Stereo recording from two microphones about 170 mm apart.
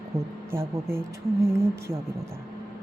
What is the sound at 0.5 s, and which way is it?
Speech, 15° right (ahead or behind).